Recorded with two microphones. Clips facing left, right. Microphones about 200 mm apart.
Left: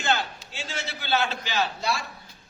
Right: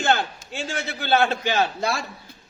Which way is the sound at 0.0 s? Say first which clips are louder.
Right 4 dB; 50° right (ahead or behind).